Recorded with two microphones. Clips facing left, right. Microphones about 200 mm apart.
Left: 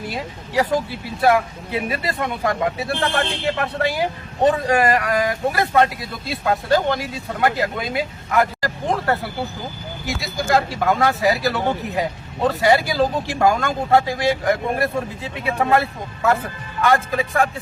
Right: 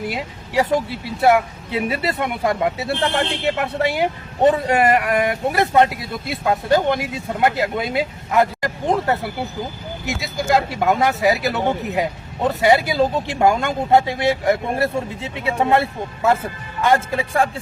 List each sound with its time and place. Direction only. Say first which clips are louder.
0.1 s speech: right 1 dB; 25° right (ahead or behind)